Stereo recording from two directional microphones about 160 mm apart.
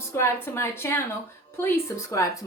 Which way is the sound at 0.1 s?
15° left (ahead or behind).